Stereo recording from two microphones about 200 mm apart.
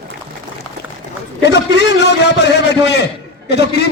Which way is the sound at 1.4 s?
60° left (ahead or behind).